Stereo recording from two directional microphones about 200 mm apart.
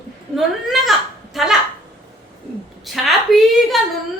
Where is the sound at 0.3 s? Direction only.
Centre (ahead or behind).